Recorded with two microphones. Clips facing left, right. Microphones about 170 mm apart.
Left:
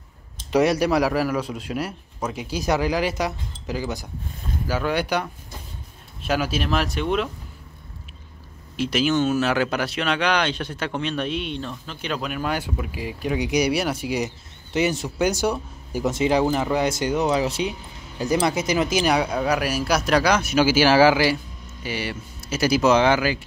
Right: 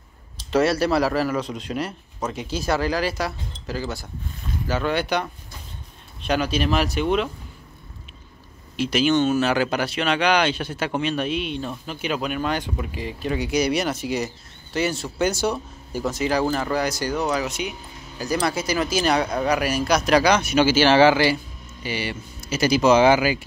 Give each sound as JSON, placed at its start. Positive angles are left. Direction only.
{"t": 0.5, "sound": "speech", "side_deg": 15}
{"t": 8.7, "sound": "speech", "side_deg": 0}
{"t": 16.1, "sound": "speech", "side_deg": 20}